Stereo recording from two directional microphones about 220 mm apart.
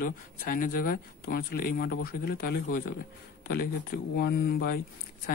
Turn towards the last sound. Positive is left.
turn(degrees=45)  # may be behind; listen again after turning